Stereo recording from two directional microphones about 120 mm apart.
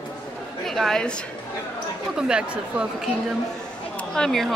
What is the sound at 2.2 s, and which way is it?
Speech, 5° right (ahead or behind).